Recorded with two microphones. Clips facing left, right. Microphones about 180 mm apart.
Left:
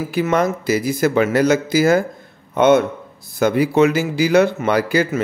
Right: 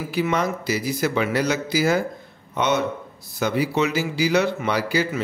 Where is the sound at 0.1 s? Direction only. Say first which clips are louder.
Left 4 dB; 50° left (ahead or behind).